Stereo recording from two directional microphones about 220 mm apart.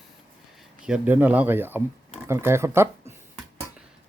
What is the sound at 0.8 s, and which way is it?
Speech, 5° right (ahead or behind).